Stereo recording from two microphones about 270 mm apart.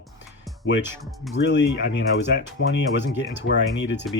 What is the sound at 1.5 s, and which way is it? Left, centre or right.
Speech, left.